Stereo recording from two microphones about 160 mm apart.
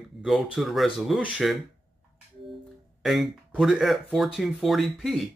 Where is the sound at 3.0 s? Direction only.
Centre (ahead or behind).